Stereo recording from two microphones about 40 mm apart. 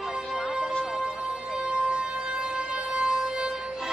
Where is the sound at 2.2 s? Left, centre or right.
Right.